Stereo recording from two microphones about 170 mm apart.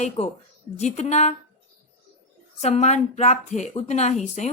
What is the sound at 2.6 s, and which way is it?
A woman's voice, 40° left (ahead or behind).